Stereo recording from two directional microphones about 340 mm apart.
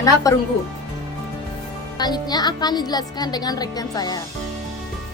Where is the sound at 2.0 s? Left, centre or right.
Centre.